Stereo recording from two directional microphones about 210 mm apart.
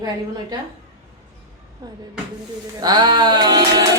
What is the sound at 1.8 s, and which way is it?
Speech, 15° right (ahead or behind).